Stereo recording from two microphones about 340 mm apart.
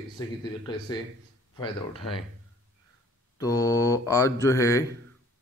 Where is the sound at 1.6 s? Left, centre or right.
Centre.